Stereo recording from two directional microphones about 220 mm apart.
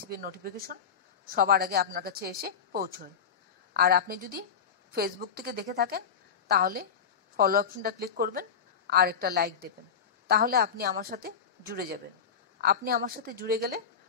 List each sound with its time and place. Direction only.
0.0 s speech: 40° right (ahead or behind)